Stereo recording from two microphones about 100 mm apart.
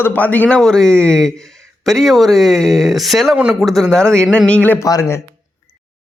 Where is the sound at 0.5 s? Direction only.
5° left (ahead or behind).